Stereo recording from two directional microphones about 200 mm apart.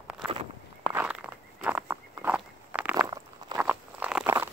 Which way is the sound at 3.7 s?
5° right (ahead or behind).